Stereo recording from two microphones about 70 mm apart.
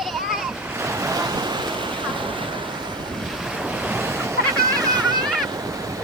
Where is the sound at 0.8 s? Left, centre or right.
Right.